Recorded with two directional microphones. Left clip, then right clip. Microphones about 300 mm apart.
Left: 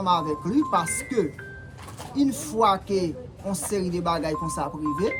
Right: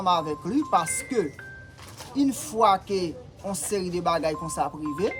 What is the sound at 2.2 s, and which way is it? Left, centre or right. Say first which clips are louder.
Speech: even; centre.